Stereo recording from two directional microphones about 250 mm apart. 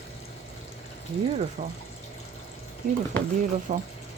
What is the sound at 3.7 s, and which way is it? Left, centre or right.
Speech, right.